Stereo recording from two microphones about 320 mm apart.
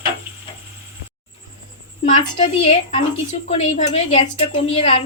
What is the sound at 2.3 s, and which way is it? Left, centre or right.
A woman's voice, centre.